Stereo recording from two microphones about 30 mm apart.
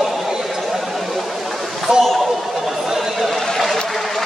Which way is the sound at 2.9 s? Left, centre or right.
Centre.